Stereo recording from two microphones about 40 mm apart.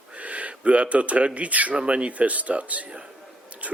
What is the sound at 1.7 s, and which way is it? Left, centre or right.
Speech, right.